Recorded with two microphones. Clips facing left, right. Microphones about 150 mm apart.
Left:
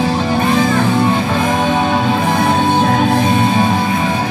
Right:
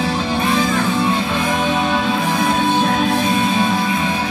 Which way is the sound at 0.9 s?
50° left (ahead or behind).